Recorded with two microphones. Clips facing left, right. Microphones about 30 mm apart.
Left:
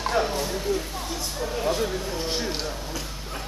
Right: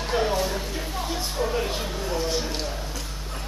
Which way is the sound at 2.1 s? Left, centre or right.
Left.